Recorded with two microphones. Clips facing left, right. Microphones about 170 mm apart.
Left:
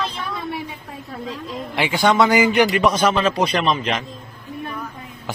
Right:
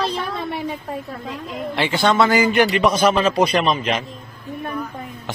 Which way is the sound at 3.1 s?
35° right (ahead or behind).